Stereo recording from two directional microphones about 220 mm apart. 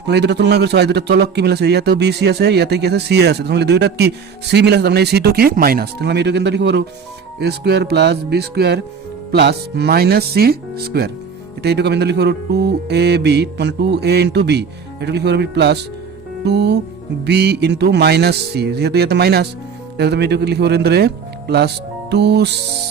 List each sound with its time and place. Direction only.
0.0 s speech: 50° right (ahead or behind)